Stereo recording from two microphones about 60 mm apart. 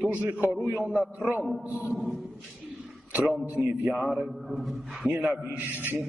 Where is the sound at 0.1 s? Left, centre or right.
Right.